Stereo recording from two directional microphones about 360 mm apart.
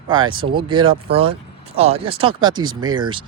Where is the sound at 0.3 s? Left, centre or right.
Centre.